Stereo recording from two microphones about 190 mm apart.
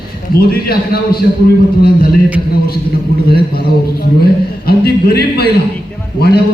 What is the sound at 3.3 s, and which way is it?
A man's voice, 55° left (ahead or behind).